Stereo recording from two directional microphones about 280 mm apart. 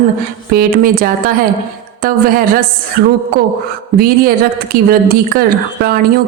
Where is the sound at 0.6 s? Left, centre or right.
Right.